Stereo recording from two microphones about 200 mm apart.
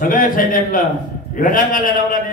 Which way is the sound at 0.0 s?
45° left (ahead or behind).